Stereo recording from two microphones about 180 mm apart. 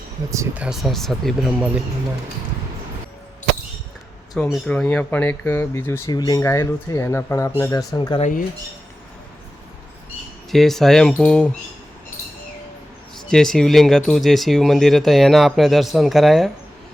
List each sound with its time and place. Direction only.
0.3 s speech: 5° right (ahead or behind)
4.4 s speech: centre (ahead or behind); by 8.2 s 25° left (ahead or behind)
10.5 s speech: centre (ahead or behind)
13.2 s speech: 5° left (ahead or behind)